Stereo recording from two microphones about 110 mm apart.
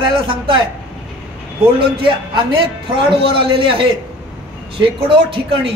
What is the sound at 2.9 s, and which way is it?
Speech, 50° right (ahead or behind).